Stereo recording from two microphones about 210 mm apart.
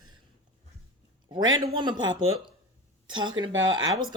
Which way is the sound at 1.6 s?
20° right (ahead or behind).